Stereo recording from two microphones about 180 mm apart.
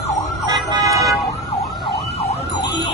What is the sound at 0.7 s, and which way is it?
Vehicle, 20° right (ahead or behind).